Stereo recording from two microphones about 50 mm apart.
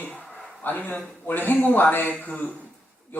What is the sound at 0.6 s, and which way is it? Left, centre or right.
Speech, left.